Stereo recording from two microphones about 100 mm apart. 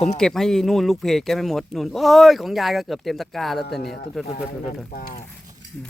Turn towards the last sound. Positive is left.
turn(degrees=-5)  # may be behind; listen again after turning